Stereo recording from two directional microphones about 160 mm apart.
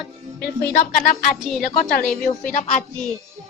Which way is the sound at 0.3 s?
75° left (ahead or behind).